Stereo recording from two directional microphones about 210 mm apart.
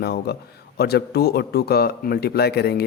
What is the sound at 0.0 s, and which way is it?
Speech, 50° left (ahead or behind).